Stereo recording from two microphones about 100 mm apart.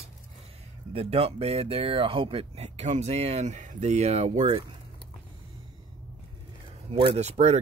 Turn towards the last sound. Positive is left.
turn(degrees=-90)